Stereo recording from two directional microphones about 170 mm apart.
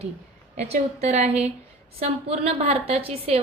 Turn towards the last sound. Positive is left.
turn(degrees=-35)  # may be behind; listen again after turning